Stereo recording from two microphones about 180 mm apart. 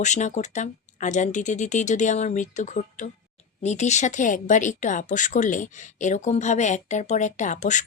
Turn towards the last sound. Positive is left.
turn(degrees=40)  # may be behind; listen again after turning